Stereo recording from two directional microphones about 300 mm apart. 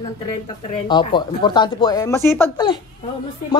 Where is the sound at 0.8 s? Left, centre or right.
Centre.